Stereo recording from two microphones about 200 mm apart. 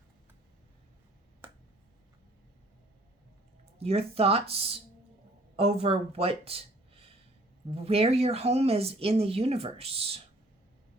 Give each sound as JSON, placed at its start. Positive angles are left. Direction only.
{"t": 3.8, "sound": "speech", "side_deg": -30}